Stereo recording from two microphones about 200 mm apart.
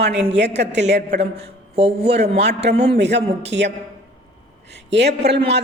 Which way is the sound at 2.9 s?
60° right (ahead or behind).